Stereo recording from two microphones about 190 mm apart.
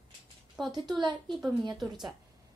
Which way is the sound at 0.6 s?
Centre (ahead or behind).